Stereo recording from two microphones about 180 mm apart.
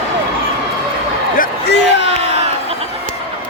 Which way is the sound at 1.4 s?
65° left (ahead or behind).